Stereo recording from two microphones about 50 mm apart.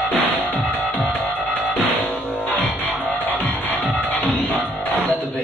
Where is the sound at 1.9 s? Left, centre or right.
Left.